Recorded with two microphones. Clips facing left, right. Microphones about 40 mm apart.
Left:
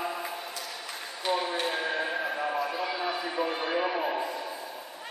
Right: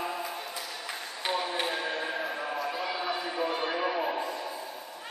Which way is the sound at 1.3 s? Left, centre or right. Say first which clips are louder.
Left 2 dB; centre.